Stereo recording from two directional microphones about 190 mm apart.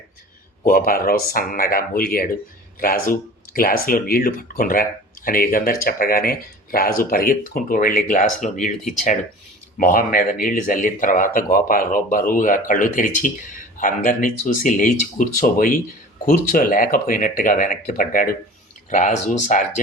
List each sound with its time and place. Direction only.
0.6 s speech: 50° left (ahead or behind)
9.7 s speech: 45° left (ahead or behind)